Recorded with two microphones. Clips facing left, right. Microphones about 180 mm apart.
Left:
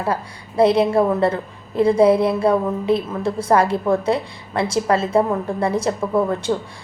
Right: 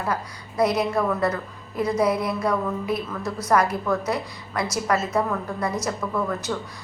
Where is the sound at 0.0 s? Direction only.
30° left (ahead or behind).